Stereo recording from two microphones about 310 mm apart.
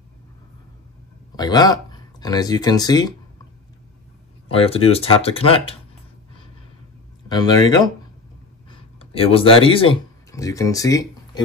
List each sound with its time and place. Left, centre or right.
1.3 s speech: centre
4.5 s speech: centre
7.2 s speech: centre